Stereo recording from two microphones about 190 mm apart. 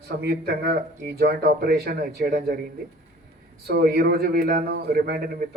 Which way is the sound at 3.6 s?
55° right (ahead or behind).